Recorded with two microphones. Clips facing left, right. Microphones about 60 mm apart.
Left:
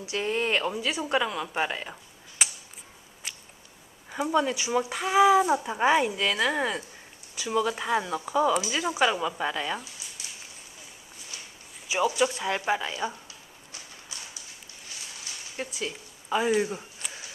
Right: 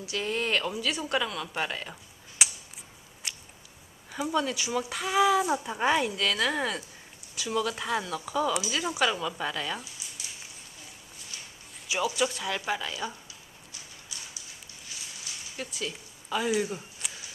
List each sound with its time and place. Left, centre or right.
0.1 s speech: left
2.4 s a sound: centre
3.2 s biting: centre
4.2 s speech: centre
11.9 s speech: centre
15.5 s speech: left
17.0 s shuffling cards: centre